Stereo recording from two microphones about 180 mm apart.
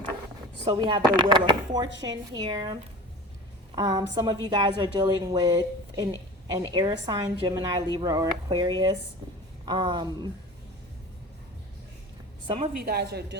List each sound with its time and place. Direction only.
0.6 s a woman's voice: 25° right (ahead or behind)
3.8 s a woman's voice: 20° right (ahead or behind)
12.8 s a woman's voice: 60° right (ahead or behind)